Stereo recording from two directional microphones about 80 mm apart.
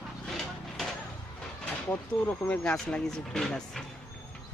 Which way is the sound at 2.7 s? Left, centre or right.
Centre.